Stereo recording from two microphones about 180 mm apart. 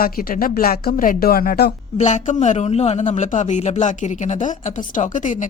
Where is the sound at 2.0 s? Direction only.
40° left (ahead or behind).